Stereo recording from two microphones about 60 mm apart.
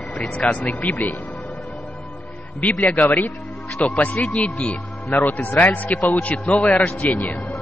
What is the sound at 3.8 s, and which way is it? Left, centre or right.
Speech, left.